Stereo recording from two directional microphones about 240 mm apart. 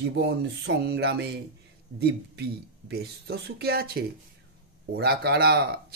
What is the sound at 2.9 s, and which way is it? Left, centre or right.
Speech, right.